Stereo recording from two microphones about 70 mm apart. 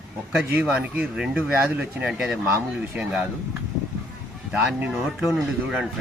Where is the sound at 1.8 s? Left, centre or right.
Centre.